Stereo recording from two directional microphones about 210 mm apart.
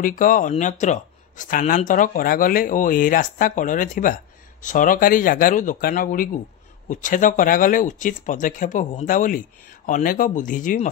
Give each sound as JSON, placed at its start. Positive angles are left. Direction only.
{"t": 0.0, "sound": "speech", "side_deg": 40}